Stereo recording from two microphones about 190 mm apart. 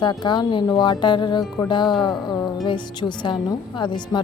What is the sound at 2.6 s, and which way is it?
A woman's voice, 25° left (ahead or behind).